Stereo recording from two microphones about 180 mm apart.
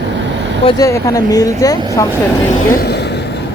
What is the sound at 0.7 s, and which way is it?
Speech, 20° left (ahead or behind).